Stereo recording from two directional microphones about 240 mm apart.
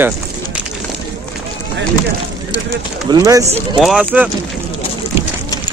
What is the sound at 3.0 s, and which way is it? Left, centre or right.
Speech, centre.